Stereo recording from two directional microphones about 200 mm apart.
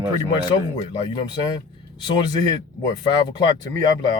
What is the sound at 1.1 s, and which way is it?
Speech, 20° left (ahead or behind).